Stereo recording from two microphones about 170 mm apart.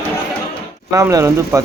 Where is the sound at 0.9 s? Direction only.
20° right (ahead or behind).